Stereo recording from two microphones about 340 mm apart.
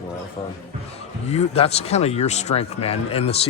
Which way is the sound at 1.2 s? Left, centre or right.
Centre.